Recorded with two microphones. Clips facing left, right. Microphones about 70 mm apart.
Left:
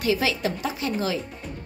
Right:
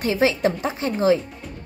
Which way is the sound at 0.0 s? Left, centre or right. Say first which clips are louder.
Right 4 dB; right.